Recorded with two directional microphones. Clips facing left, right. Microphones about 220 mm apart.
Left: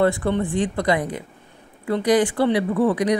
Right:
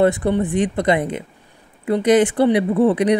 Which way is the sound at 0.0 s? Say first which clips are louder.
Right 3 dB; 20° right (ahead or behind).